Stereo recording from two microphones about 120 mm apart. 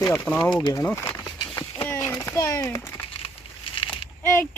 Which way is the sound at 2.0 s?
20° left (ahead or behind).